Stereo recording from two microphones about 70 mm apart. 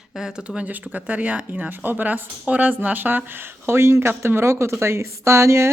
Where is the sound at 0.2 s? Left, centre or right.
Centre.